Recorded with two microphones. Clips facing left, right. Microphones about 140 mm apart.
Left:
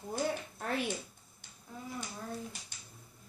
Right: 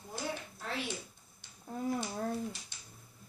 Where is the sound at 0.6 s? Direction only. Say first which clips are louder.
Left 6 dB; 55° left (ahead or behind).